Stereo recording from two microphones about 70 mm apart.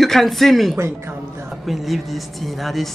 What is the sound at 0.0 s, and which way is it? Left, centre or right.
Speech, centre.